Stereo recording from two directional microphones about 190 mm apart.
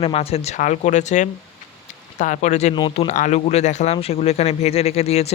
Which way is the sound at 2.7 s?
25° left (ahead or behind).